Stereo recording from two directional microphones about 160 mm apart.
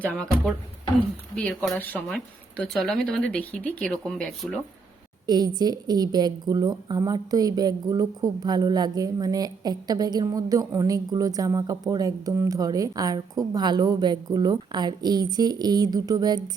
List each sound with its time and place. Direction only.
0.0 s speech: 5° left (ahead or behind)
1.5 s speech: 5° left (ahead or behind)
5.2 s a woman's voice: 25° right (ahead or behind)